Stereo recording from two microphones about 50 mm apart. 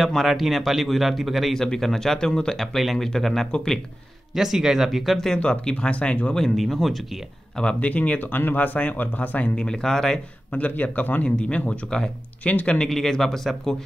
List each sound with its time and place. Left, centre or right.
0.0 s a man's voice: centre
4.3 s speech: centre
5.4 s speech: centre
6.4 s speech: centre
7.5 s a man's voice: centre
7.9 s speech: left
9.6 s a man's voice: centre
10.5 s speech: left
11.2 s speech: left
12.8 s a man's voice: centre